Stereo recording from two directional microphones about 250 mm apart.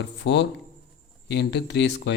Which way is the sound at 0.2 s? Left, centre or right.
Left.